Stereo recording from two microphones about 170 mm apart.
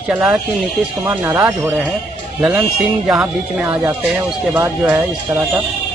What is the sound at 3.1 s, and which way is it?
Speech, 5° right (ahead or behind).